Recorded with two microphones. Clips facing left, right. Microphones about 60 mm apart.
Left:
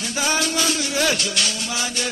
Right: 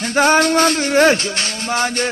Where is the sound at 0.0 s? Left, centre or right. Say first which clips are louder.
Right 9 dB; right.